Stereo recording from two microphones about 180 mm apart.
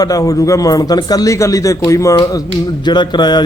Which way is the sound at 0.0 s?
20° left (ahead or behind).